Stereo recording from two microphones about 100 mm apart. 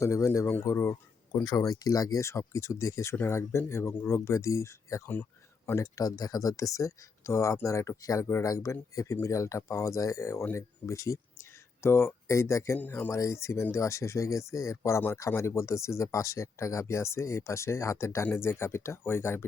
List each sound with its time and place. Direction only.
0.0 s speech: 30° left (ahead or behind)